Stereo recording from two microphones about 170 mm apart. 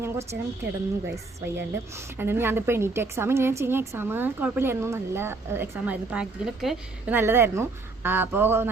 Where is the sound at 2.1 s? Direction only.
15° right (ahead or behind).